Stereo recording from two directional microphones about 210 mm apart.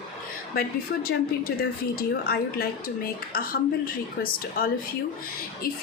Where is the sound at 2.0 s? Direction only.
45° left (ahead or behind).